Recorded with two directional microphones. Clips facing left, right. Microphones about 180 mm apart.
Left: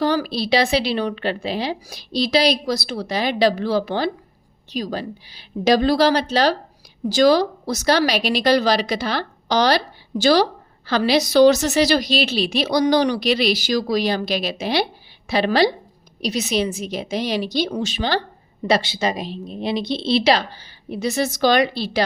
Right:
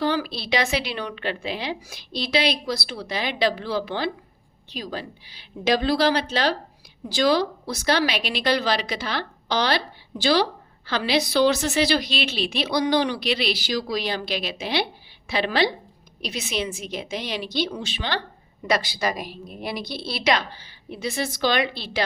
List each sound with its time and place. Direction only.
0.0 s a woman's voice: 40° left (ahead or behind)
18.7 s a woman's voice: 25° left (ahead or behind)